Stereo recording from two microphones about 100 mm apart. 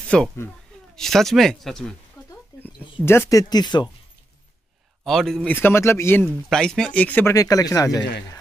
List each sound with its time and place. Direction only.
0.1 s speech: 10° left (ahead or behind)
2.5 s a sound: 40° left (ahead or behind)
3.1 s speech: 30° left (ahead or behind); by 3.9 s 45° left (ahead or behind)
5.0 s speech: 5° left (ahead or behind)
5.5 s speech: 20° left (ahead or behind)
6.5 s speech: 5° left (ahead or behind)
7.3 s speech: 35° left (ahead or behind)